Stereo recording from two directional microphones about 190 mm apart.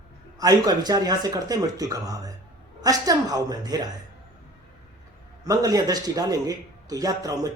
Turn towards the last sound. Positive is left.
turn(degrees=-20)  # may be behind; listen again after turning